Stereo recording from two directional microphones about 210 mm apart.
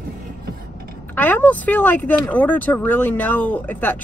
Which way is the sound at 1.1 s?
10° left (ahead or behind).